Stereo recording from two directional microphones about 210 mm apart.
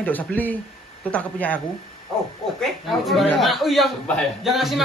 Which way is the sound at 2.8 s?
Centre (ahead or behind).